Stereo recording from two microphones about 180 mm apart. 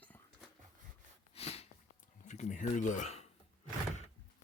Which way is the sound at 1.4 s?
35° left (ahead or behind).